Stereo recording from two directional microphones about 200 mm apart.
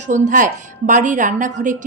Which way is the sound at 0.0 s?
40° right (ahead or behind).